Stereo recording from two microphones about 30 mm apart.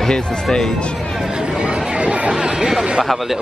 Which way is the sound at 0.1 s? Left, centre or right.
Left.